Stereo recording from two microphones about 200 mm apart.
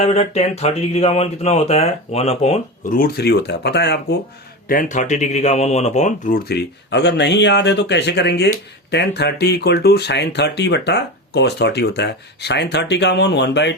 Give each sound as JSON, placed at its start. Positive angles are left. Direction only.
{"t": 0.0, "sound": "speech", "side_deg": 30}
{"t": 3.0, "sound": "speech", "side_deg": 50}
{"t": 4.7, "sound": "speech", "side_deg": 40}